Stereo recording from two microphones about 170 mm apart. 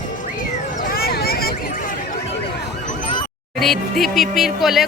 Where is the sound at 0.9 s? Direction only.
65° left (ahead or behind).